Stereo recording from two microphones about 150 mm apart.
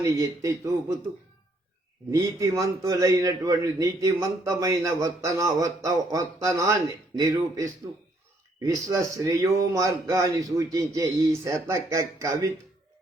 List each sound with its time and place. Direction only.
0.0 s a man's voice: 20° right (ahead or behind)
2.0 s a man's voice: 20° right (ahead or behind)
8.6 s a man's voice: 20° right (ahead or behind)